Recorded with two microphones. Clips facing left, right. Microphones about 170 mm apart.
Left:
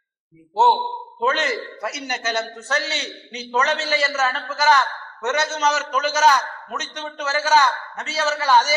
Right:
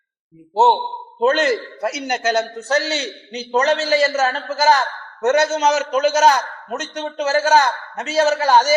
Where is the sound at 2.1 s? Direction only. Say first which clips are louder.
Right 7 dB; 45° right (ahead or behind).